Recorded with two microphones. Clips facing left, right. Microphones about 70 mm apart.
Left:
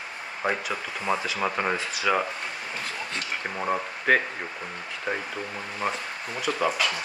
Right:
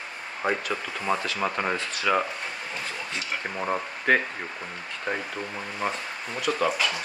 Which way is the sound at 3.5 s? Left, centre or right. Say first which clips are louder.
Left 1 dB; centre.